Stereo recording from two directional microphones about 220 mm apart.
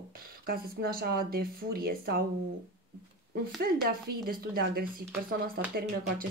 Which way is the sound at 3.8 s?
45° right (ahead or behind).